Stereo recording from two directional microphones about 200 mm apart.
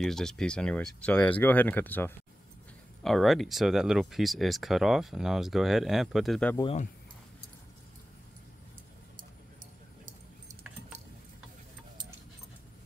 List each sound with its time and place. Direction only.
0.0 s speech: centre (ahead or behind)
6.5 s speech: 25° left (ahead or behind)